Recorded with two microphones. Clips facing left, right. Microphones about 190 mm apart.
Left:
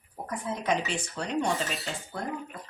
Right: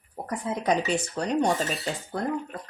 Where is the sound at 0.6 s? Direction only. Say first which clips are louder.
Right 5 dB; 40° right (ahead or behind).